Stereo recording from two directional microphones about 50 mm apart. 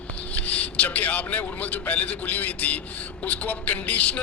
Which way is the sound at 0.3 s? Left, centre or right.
Left.